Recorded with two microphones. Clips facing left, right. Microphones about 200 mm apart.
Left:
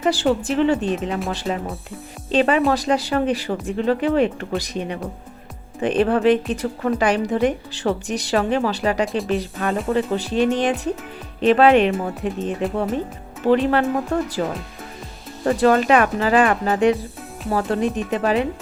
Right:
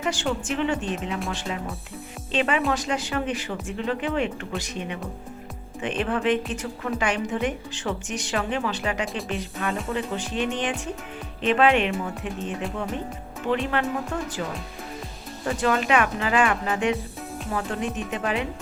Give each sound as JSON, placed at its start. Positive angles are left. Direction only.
{"t": 0.0, "sound": "a woman's voice", "side_deg": 35}
{"t": 13.7, "sound": "a woman's voice", "side_deg": 35}
{"t": 15.4, "sound": "a woman's voice", "side_deg": 40}